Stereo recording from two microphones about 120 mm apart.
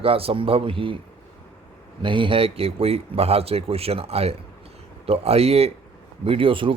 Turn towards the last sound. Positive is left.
turn(degrees=-45)  # may be behind; listen again after turning